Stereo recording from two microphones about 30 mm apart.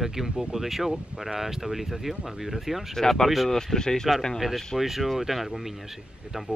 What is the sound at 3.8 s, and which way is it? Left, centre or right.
Speech, left.